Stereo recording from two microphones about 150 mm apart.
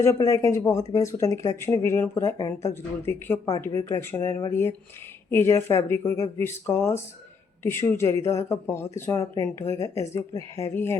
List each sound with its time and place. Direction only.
0.0 s speech: 20° left (ahead or behind)